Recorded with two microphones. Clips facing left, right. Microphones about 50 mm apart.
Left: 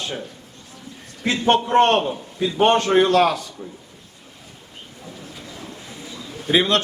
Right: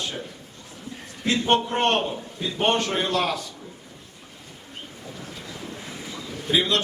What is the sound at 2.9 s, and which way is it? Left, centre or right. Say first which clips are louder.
Speech: left 9 dB; left.